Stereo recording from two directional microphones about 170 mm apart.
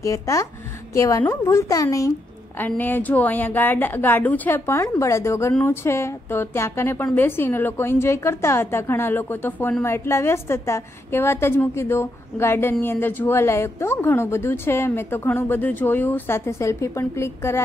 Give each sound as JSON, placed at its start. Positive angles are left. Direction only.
{"t": 0.0, "sound": "a woman's voice", "side_deg": 20}